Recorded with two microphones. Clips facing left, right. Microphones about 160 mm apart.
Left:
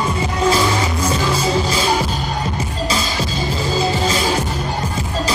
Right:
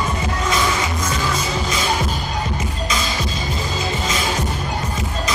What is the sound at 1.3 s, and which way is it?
Music, 30° left (ahead or behind).